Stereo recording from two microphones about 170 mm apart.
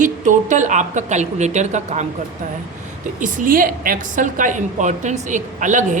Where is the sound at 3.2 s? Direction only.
50° right (ahead or behind).